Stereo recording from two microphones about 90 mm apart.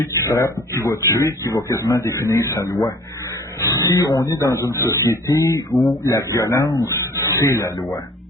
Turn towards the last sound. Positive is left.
turn(degrees=30)  # may be behind; listen again after turning